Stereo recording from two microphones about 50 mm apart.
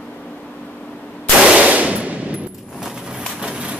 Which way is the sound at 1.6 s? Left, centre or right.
Right.